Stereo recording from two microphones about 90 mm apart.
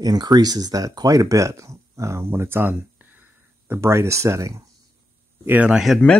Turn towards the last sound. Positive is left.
turn(degrees=-5)  # may be behind; listen again after turning